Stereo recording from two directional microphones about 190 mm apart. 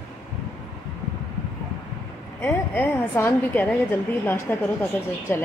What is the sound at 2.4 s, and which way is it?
A woman's voice, 10° left (ahead or behind).